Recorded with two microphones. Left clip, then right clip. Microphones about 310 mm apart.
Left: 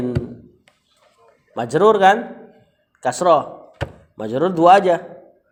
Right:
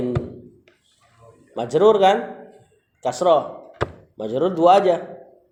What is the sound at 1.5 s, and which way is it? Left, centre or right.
A man's voice, left.